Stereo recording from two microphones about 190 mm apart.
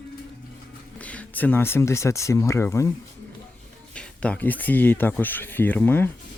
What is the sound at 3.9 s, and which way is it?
Speech, 5° left (ahead or behind).